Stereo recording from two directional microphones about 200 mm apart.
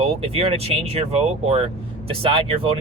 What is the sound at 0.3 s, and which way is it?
Speech, 30° right (ahead or behind).